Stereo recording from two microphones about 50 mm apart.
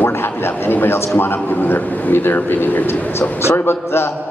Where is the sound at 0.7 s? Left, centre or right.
Left.